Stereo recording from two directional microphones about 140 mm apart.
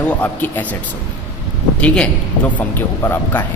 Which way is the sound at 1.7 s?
10° left (ahead or behind).